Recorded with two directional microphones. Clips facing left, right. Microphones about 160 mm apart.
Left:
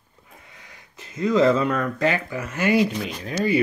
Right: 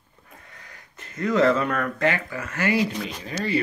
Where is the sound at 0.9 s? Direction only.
10° left (ahead or behind).